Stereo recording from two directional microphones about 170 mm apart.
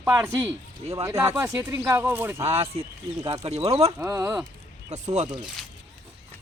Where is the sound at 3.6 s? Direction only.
35° right (ahead or behind).